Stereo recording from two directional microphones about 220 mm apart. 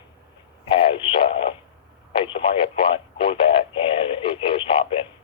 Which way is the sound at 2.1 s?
25° left (ahead or behind).